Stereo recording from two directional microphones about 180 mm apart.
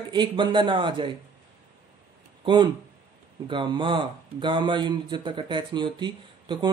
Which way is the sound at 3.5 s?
25° right (ahead or behind).